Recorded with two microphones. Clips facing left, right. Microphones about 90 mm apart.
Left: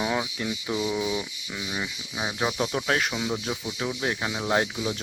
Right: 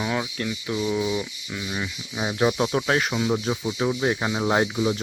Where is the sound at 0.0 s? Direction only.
10° left (ahead or behind).